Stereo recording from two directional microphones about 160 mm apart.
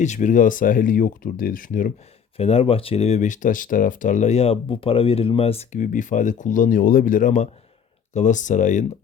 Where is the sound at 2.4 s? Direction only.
40° left (ahead or behind).